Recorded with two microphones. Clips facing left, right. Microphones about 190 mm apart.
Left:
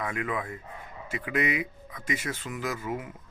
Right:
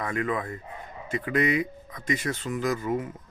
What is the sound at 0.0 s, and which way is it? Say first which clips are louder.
Speech: right 3 dB; 5° left (ahead or behind).